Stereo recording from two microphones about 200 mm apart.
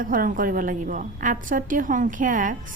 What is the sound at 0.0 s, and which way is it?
A woman's voice, 45° right (ahead or behind).